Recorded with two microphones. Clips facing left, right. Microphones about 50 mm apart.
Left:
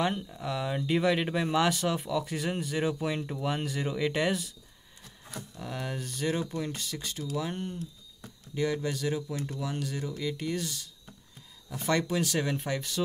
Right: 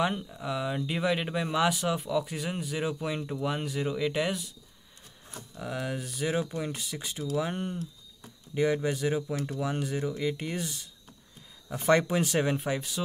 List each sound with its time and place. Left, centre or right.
0.0 s speech: centre
5.6 s speech: centre; by 12.5 s right
12.5 s speech: centre